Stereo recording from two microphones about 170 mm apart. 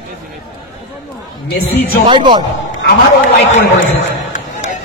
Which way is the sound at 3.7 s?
45° left (ahead or behind).